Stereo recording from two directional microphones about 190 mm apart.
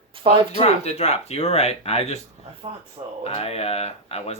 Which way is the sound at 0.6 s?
35° left (ahead or behind).